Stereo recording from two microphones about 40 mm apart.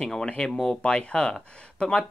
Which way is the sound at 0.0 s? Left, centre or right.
Centre.